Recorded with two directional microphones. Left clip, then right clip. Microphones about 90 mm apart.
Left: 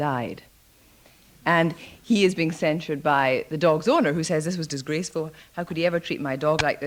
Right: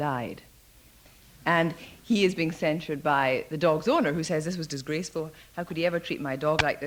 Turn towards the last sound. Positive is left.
turn(degrees=-35)  # may be behind; listen again after turning